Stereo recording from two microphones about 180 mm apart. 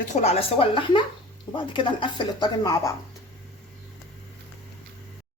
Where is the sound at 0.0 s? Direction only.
40° left (ahead or behind); by 2.9 s 20° left (ahead or behind).